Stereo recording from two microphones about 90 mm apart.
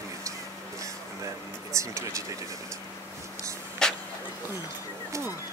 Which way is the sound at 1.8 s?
35° right (ahead or behind).